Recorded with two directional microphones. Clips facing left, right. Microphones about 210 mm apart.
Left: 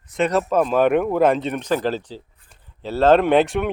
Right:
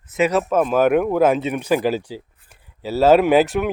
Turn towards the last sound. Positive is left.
turn(degrees=-5)  # may be behind; listen again after turning